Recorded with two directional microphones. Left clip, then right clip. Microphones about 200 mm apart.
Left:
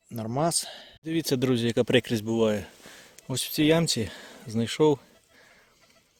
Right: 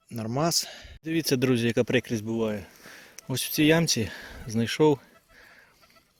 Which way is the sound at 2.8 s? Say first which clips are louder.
Right 1 dB; centre (ahead or behind).